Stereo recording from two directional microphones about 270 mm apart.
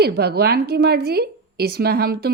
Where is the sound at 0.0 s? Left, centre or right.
Right.